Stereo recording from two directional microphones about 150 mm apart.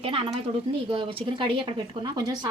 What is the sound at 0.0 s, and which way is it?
A woman's voice, 40° right (ahead or behind).